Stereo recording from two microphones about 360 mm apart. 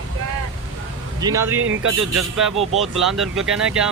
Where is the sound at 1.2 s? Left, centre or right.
Centre.